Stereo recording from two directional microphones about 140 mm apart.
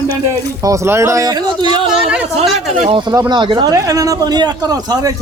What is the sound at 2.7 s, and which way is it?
Speech, 55° right (ahead or behind).